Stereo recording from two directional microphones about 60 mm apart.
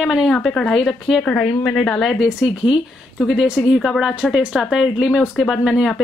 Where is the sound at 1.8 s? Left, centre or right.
Centre.